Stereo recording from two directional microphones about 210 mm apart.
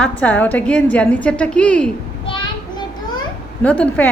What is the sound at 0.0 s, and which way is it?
A woman's voice, 5° left (ahead or behind).